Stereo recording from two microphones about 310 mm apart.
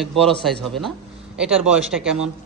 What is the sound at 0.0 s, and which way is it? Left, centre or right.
A man's voice, centre.